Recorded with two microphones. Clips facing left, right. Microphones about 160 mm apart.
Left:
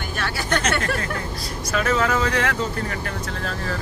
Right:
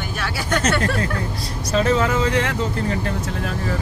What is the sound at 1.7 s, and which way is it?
Speech, 30° right (ahead or behind).